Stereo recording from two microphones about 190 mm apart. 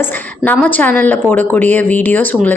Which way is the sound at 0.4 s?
10° left (ahead or behind).